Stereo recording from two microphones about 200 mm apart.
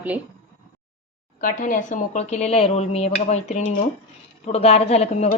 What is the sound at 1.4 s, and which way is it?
Speech, 40° left (ahead or behind).